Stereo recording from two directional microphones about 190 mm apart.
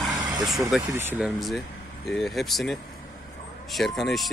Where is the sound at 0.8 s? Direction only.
10° right (ahead or behind).